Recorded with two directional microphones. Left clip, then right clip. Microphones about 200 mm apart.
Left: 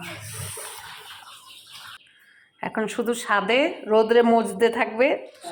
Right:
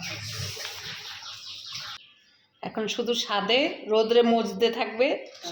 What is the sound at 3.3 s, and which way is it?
Speech, 15° left (ahead or behind).